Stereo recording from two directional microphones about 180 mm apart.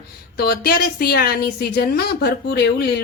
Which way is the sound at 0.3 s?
60° left (ahead or behind).